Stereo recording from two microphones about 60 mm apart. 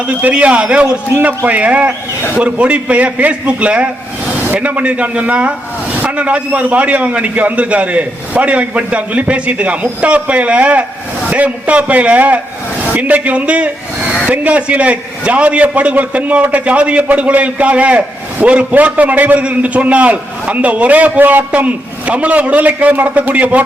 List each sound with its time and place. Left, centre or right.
0.0 s a man's voice: right